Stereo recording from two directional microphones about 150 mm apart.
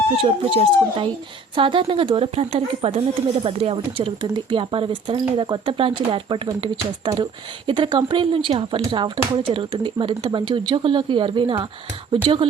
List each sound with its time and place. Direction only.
0.2 s speech: 35° right (ahead or behind)